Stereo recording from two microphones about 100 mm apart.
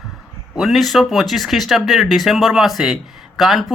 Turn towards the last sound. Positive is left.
turn(degrees=0)  # may be behind; listen again after turning